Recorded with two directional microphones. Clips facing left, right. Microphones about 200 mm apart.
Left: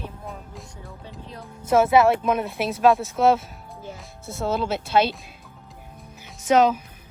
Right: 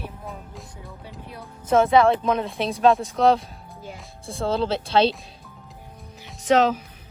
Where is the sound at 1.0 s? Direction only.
10° right (ahead or behind).